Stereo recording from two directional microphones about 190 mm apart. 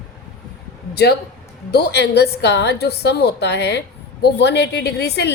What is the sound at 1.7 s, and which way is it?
A woman's voice, 60° left (ahead or behind).